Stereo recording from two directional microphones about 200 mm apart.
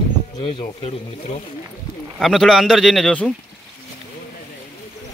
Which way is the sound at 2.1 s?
Centre (ahead or behind).